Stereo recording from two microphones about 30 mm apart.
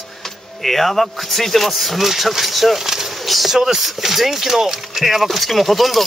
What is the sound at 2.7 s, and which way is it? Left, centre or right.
Speech, centre.